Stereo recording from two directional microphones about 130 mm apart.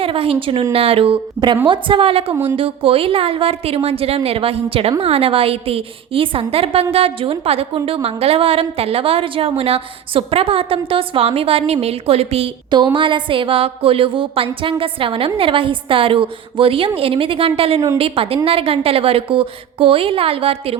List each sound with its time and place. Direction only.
0.0 s a woman's voice: 45° right (ahead or behind)
2.3 s speech: 25° right (ahead or behind)
2.6 s a woman's voice: 45° right (ahead or behind)